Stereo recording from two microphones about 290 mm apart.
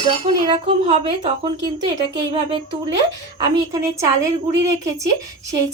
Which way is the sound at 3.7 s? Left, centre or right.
Centre.